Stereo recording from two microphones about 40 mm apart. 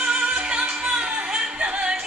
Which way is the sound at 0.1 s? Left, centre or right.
Right.